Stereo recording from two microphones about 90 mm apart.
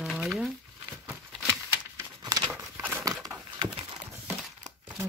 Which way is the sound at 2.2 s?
50° right (ahead or behind).